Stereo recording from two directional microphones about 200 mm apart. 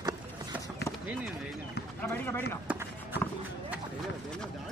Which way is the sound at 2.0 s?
10° left (ahead or behind).